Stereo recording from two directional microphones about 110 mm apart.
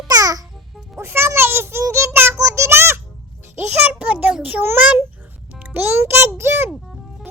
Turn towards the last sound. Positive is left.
turn(degrees=-20)  # may be behind; listen again after turning